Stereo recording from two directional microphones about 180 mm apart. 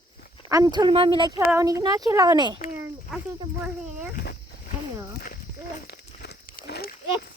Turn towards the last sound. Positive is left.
turn(degrees=60)  # may be behind; listen again after turning